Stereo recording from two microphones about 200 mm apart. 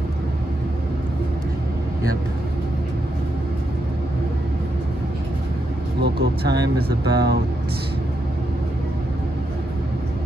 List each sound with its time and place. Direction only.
5.9 s vehicle: 55° right (ahead or behind)
6.9 s speech: 55° right (ahead or behind)